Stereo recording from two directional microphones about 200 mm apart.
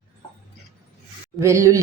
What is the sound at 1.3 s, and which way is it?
Speech, 15° right (ahead or behind).